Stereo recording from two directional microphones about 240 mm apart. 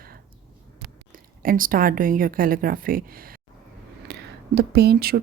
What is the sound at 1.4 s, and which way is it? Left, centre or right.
Speech, right.